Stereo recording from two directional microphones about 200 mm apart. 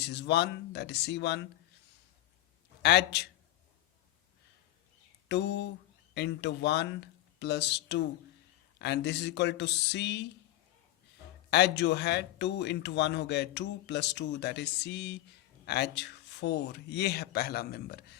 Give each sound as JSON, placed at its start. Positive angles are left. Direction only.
{"t": 0.0, "sound": "speech", "side_deg": 60}
{"t": 2.8, "sound": "speech", "side_deg": 60}
{"t": 5.3, "sound": "speech", "side_deg": 60}
{"t": 11.5, "sound": "speech", "side_deg": 60}